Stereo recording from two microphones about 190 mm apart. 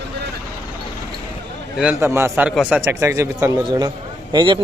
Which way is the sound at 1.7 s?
10° right (ahead or behind).